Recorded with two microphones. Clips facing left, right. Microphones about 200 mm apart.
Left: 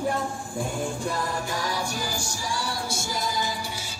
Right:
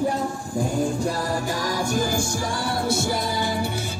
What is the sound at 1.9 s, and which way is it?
Music, 55° right (ahead or behind).